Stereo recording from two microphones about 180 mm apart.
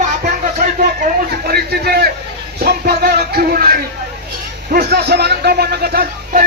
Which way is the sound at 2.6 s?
60° right (ahead or behind).